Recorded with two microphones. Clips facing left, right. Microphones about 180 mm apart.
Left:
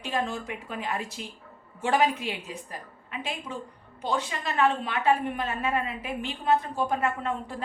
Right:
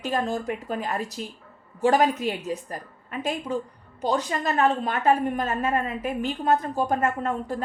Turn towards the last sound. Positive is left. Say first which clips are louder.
# right 4 dB
turn(degrees=-45)  # may be behind; listen again after turning